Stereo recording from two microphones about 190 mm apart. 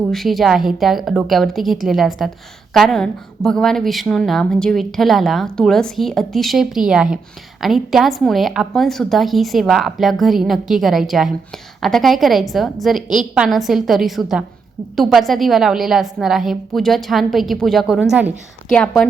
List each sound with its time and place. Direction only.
0.1 s a woman's voice: centre (ahead or behind)
18.7 s a woman's voice: 5° left (ahead or behind)